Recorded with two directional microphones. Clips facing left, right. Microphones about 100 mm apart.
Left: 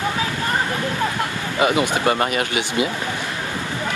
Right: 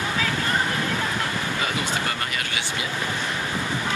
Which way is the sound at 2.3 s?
20° left (ahead or behind).